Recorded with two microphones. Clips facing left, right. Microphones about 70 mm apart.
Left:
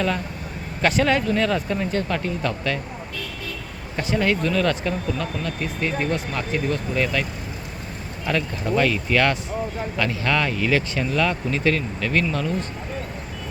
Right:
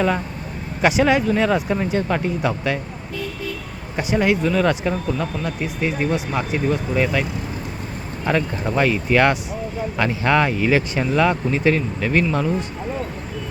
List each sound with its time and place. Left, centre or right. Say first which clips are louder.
0.8 s speech: right 3 dB; centre
3.9 s speech: right 3 dB; centre
8.3 s speech: right 2 dB; right